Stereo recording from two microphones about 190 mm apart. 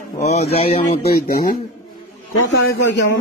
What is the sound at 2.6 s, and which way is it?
Speech, 70° left (ahead or behind).